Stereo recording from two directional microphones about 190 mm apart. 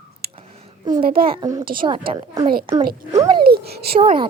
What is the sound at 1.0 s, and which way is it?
Speech, 50° right (ahead or behind).